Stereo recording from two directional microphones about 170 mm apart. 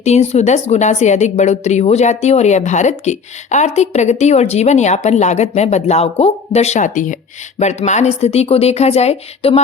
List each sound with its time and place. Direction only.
0.0 s a woman's voice: 40° left (ahead or behind)